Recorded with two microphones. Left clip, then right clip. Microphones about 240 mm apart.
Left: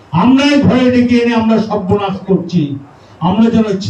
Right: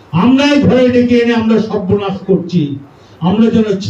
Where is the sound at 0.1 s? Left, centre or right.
Left.